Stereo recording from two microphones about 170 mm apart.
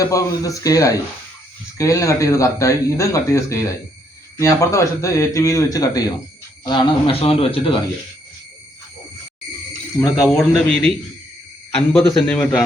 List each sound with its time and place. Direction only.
0.0 s speech: 20° left (ahead or behind)
9.9 s speech: 20° left (ahead or behind)
10.2 s speech: 5° left (ahead or behind)